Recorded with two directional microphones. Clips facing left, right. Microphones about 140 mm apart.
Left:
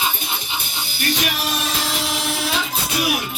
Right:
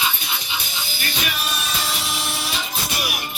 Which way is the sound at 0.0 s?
50° left (ahead or behind).